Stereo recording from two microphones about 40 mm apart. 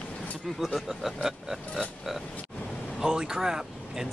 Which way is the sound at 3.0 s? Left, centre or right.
Centre.